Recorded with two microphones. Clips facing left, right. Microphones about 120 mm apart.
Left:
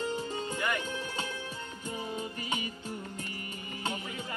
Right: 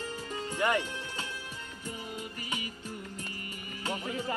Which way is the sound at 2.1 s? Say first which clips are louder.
Left 3 dB; 25° left (ahead or behind).